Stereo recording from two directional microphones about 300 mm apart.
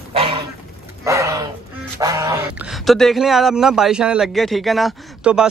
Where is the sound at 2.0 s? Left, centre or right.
Centre.